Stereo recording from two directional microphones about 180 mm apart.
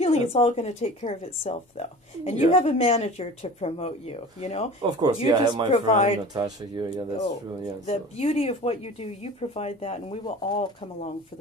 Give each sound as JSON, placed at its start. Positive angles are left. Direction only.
{"t": 0.0, "sound": "speech", "side_deg": 35}
{"t": 4.8, "sound": "speech", "side_deg": -20}
{"t": 5.7, "sound": "speech", "side_deg": 35}
{"t": 6.3, "sound": "speech", "side_deg": -25}
{"t": 7.8, "sound": "speech", "side_deg": 35}